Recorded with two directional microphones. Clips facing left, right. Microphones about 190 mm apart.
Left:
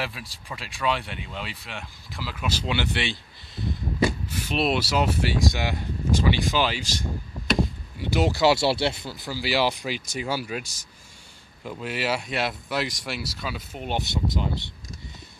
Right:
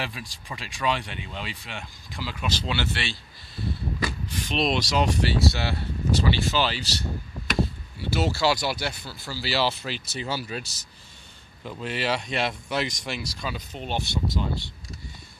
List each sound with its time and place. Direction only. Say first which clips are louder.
0.0 s speech: left 1 dB; centre (ahead or behind); by 4.1 s 20° left (ahead or behind)
4.3 s speech: left 1 dB; 10° left (ahead or behind)